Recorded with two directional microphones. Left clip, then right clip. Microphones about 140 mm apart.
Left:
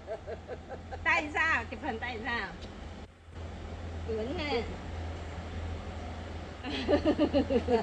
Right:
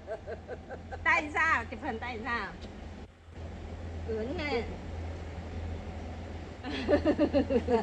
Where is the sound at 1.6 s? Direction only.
35° right (ahead or behind).